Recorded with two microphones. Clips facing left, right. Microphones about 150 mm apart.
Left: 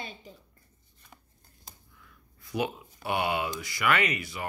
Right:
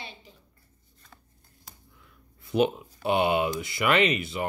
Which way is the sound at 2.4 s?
25° right (ahead or behind).